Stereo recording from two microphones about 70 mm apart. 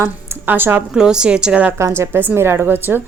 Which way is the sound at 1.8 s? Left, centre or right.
Right.